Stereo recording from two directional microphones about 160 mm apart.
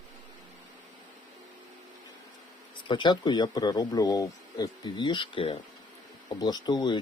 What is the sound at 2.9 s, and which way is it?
Speech, 30° left (ahead or behind).